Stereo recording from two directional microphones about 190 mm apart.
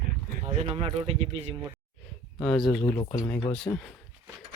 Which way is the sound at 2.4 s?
5° left (ahead or behind).